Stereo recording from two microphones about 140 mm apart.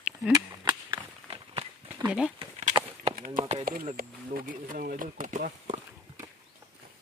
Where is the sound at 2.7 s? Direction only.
35° right (ahead or behind).